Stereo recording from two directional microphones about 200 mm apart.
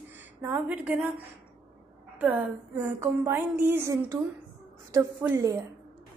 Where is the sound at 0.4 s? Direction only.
10° right (ahead or behind).